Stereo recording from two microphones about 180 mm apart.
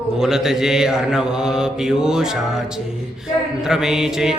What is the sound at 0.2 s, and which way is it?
Mantra, 5° right (ahead or behind).